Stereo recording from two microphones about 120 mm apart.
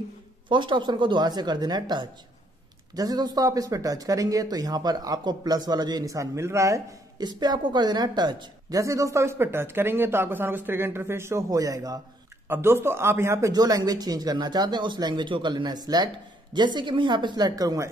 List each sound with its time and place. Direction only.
0.5 s speech: 40° right (ahead or behind); by 13.5 s 20° right (ahead or behind)
13.5 s speech: 35° right (ahead or behind)